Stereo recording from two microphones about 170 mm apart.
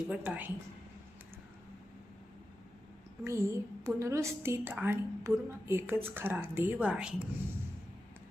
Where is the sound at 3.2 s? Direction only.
15° right (ahead or behind).